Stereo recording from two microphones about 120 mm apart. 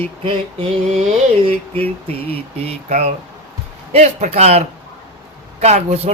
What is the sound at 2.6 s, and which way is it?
A man's voice, 70° right (ahead or behind).